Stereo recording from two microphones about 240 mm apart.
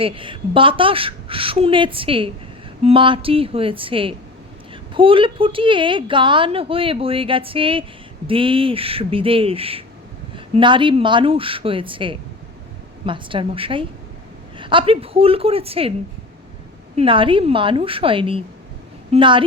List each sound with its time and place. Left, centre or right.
0.0 s a woman's voice: right
16.9 s a woman's voice: right